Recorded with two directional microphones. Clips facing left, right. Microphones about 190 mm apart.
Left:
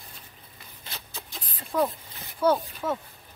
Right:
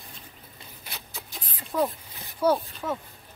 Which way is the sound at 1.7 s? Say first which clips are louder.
Even; 5° right (ahead or behind).